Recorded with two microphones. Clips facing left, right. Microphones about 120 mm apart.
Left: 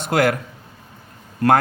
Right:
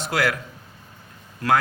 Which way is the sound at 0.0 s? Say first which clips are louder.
Left 5 dB; 50° left (ahead or behind).